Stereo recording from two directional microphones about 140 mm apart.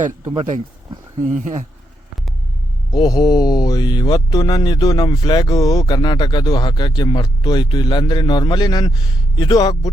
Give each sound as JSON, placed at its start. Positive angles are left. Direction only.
{"t": 1.2, "sound": "speech", "side_deg": -60}
{"t": 2.9, "sound": "speech", "side_deg": 30}